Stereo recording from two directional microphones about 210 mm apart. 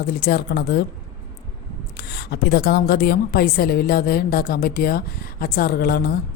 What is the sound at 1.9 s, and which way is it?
A woman's voice, 50° left (ahead or behind).